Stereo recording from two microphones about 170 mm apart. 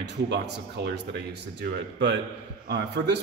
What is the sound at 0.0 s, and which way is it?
Speech, 80° right.